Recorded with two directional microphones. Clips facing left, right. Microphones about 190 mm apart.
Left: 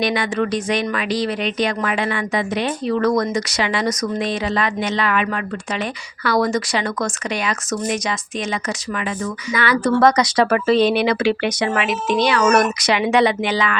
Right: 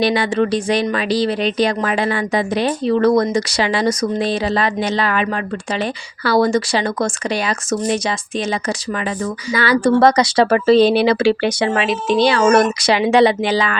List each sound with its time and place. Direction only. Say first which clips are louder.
0.0 s speech: right 4 dB; 30° right (ahead or behind)